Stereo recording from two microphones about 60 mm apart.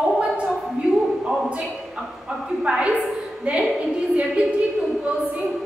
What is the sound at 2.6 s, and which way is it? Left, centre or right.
Speech, centre.